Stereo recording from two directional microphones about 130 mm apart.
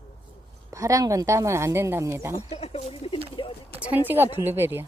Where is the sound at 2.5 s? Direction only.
50° left (ahead or behind).